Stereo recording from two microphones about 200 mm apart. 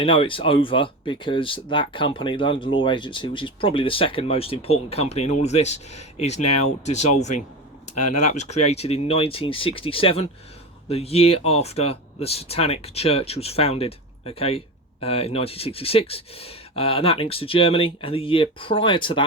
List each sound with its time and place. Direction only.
0.0 s speech: 25° left (ahead or behind)